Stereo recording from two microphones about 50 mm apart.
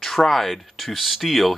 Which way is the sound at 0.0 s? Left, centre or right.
Centre.